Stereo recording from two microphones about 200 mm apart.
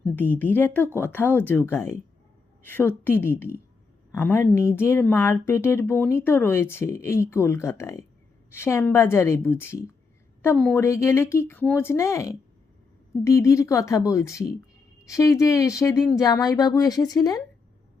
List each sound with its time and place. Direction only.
0.2 s speech: 10° left (ahead or behind)